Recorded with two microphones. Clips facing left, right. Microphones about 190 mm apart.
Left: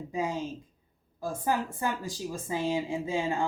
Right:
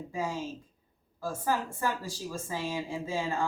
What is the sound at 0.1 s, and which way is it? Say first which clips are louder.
Speech: left 3 dB; 20° left (ahead or behind).